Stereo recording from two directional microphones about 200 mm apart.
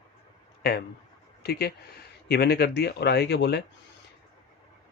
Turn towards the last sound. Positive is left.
turn(degrees=55)  # may be behind; listen again after turning